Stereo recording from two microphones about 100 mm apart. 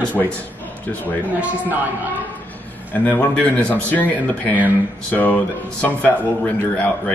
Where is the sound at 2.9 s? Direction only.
15° left (ahead or behind).